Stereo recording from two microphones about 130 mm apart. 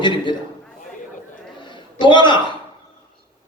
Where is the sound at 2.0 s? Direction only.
35° left (ahead or behind).